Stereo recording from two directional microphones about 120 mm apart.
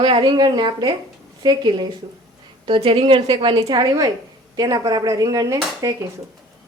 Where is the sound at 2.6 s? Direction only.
50° right (ahead or behind); by 6.0 s 25° right (ahead or behind).